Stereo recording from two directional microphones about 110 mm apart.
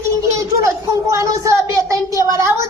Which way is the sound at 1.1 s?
30° right (ahead or behind).